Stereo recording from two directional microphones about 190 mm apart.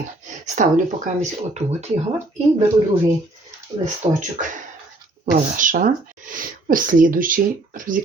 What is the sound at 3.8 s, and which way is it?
Speech, 40° right (ahead or behind).